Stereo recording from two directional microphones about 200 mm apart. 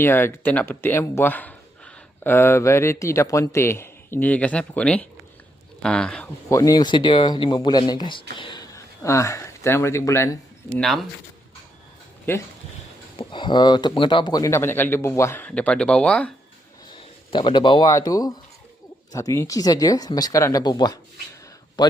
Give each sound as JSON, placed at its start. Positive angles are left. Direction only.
{"t": 0.0, "sound": "speech", "side_deg": 10}
{"t": 6.5, "sound": "speech", "side_deg": 15}
{"t": 10.8, "sound": "speech", "side_deg": 0}
{"t": 13.1, "sound": "speech", "side_deg": 25}
{"t": 17.3, "sound": "speech", "side_deg": 25}